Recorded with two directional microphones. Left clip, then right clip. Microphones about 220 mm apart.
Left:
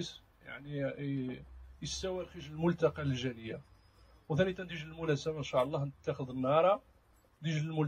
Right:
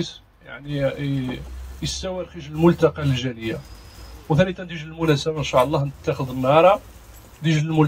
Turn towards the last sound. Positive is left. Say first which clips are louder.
# right 16 dB
turn(degrees=30)  # may be behind; listen again after turning